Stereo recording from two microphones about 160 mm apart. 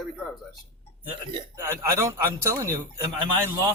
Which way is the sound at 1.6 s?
15° right (ahead or behind).